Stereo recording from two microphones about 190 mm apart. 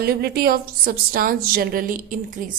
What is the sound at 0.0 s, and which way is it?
A woman's voice, 55° right (ahead or behind).